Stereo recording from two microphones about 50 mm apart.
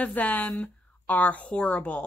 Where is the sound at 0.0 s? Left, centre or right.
Left.